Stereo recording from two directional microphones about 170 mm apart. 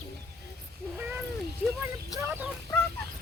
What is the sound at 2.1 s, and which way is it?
Fowl, 15° right (ahead or behind).